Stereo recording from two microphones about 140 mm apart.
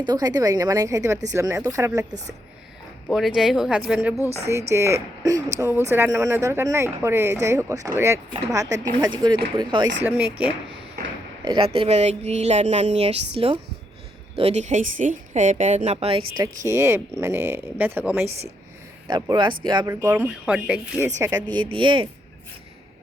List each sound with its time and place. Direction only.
0.0 s speech: 30° right (ahead or behind)
3.1 s speech: centre (ahead or behind)
4.7 s speech: 20° right (ahead or behind)
9.0 s speech: 30° right (ahead or behind)
10.0 s speech: 10° right (ahead or behind)
11.4 s a woman's voice: 40° right (ahead or behind)
16.4 s speech: 20° right (ahead or behind)
19.0 s speech: 30° right (ahead or behind)
19.9 s speech: 20° right (ahead or behind)
20.4 s speech: 5° right (ahead or behind)
21.2 s speech: 20° right (ahead or behind)
21.5 s speech: 35° right (ahead or behind)